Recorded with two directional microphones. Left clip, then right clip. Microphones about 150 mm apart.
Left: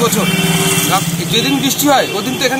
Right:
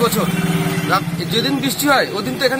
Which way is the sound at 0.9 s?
15° right (ahead or behind).